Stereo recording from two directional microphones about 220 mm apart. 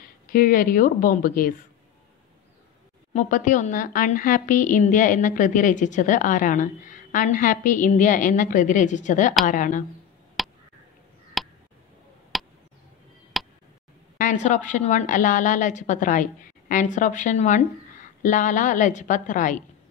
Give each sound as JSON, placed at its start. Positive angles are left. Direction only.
{"t": 0.3, "sound": "a woman's voice", "side_deg": 40}
{"t": 3.1, "sound": "a woman's voice", "side_deg": 35}
{"t": 10.4, "sound": "a sound", "side_deg": 0}
{"t": 14.1, "sound": "a woman's voice", "side_deg": 35}